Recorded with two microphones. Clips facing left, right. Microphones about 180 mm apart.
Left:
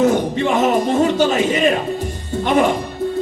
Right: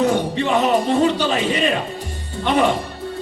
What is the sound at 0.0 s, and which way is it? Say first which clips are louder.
Speech: left 3 dB; 45° left (ahead or behind).